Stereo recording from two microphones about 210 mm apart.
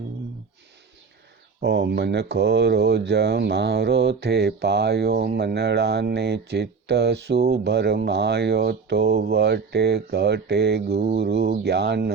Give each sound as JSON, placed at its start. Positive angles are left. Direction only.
{"t": 1.6, "sound": "speech", "side_deg": -55}